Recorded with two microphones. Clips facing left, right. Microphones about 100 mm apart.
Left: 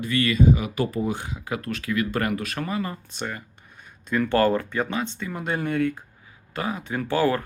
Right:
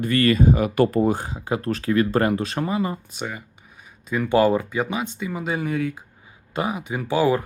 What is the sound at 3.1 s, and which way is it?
Speech, 5° right (ahead or behind).